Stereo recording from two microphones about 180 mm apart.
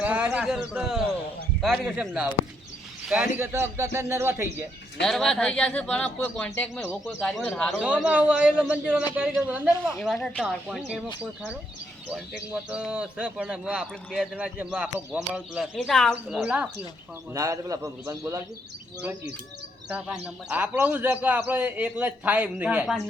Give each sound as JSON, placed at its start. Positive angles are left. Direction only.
{"t": 0.0, "sound": "speech", "side_deg": -5}
{"t": 3.4, "sound": "a man's voice", "side_deg": -15}
{"t": 5.0, "sound": "speech", "side_deg": 5}
{"t": 8.0, "sound": "a man's voice", "side_deg": -5}
{"t": 12.0, "sound": "a man's voice", "side_deg": -5}
{"t": 17.3, "sound": "a man's voice", "side_deg": -15}
{"t": 19.9, "sound": "a man's voice", "side_deg": -5}